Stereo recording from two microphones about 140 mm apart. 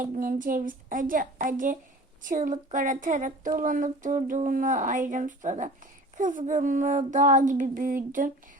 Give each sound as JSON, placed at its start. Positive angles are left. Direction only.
{"t": 0.0, "sound": "speech", "side_deg": -70}